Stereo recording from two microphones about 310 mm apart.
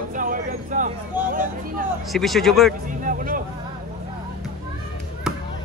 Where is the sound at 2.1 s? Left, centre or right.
Centre.